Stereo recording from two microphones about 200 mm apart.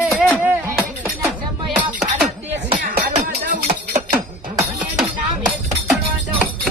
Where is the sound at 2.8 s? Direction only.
55° right (ahead or behind).